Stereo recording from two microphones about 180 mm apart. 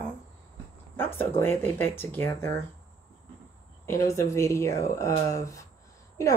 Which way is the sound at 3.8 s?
15° left (ahead or behind).